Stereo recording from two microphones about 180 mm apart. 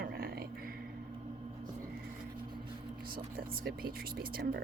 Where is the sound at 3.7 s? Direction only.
55° right (ahead or behind).